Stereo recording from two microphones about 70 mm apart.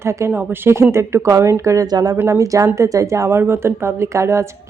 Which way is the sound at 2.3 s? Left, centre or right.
Right.